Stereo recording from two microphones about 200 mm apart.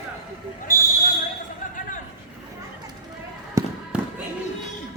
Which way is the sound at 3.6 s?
15° right (ahead or behind).